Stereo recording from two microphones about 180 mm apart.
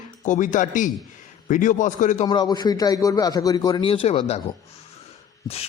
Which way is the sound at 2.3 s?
25° left (ahead or behind).